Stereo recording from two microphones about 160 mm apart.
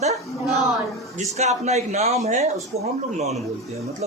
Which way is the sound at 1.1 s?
45° right (ahead or behind).